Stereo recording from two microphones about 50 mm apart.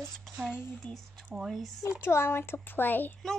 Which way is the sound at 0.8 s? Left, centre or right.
Left.